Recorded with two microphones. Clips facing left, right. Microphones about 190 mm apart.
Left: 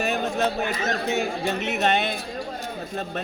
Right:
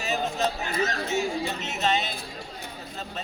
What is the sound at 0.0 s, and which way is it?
A man's voice, 60° left (ahead or behind).